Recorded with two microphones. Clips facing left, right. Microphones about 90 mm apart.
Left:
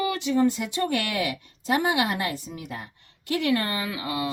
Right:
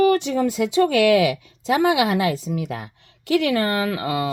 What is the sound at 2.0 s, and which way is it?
A woman's voice, 90° right.